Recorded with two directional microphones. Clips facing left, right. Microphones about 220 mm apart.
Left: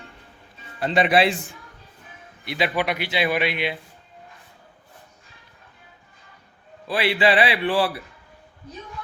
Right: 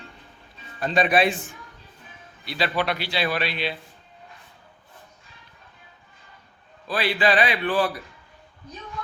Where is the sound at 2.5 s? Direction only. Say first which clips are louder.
Left 1 dB; 20° left (ahead or behind).